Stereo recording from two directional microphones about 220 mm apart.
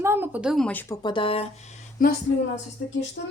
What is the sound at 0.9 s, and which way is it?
Speech, 20° left (ahead or behind).